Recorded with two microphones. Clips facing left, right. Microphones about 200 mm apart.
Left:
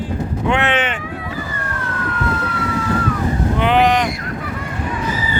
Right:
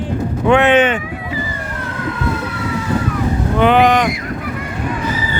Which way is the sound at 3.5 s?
50° right (ahead or behind).